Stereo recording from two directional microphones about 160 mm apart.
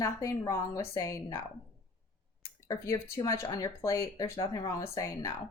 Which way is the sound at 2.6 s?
20° left (ahead or behind).